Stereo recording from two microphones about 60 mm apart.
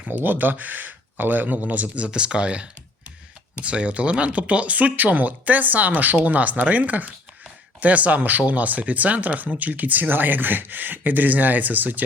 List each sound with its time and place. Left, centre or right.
0.1 s speech: right